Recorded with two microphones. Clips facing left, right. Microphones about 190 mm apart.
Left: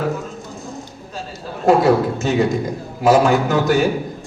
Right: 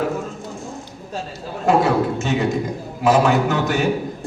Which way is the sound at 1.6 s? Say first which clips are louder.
Left 3 dB; 35° left (ahead or behind).